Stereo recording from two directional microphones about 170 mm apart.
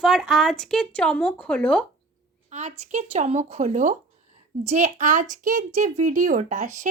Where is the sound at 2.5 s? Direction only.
40° right (ahead or behind).